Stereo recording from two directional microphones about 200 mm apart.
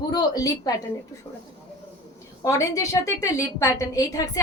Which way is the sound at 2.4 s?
15° left (ahead or behind).